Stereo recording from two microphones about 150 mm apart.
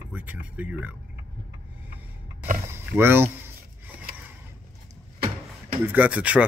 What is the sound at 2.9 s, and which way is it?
Speech, 15° right (ahead or behind).